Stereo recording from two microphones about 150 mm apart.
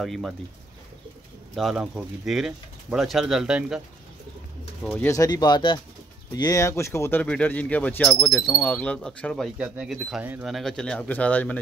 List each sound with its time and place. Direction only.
0.0 s speech: centre (ahead or behind)
1.5 s speech: centre (ahead or behind)
5.0 s speech: 20° left (ahead or behind); by 10.5 s 10° right (ahead or behind)
10.5 s speech: 5° left (ahead or behind)